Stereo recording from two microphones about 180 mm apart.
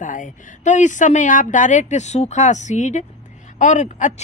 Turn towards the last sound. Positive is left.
turn(degrees=45)  # may be behind; listen again after turning